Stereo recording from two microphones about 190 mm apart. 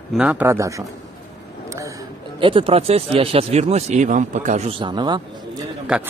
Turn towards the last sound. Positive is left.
turn(degrees=-5)  # may be behind; listen again after turning